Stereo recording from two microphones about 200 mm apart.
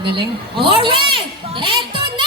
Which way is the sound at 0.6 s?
25° right (ahead or behind).